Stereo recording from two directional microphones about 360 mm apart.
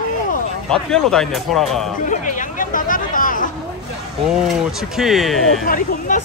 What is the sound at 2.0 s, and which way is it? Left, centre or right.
Chatter, left.